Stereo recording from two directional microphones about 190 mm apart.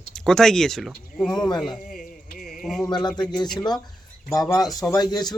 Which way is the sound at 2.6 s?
Centre (ahead or behind).